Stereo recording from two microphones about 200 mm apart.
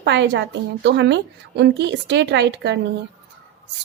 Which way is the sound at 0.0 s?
60° right (ahead or behind).